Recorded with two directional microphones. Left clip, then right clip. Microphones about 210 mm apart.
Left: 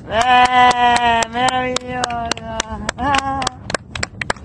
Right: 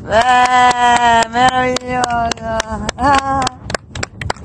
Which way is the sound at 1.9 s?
5° right (ahead or behind).